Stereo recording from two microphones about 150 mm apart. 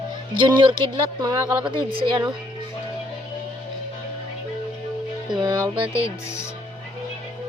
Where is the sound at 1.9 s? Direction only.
30° right (ahead or behind).